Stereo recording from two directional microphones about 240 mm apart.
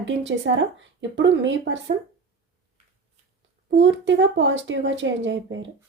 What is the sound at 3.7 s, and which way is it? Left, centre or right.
Speech, right.